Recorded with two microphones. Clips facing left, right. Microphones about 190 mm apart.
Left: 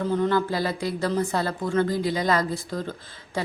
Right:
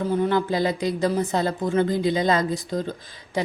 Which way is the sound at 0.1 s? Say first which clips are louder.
Right 1 dB; 15° right (ahead or behind).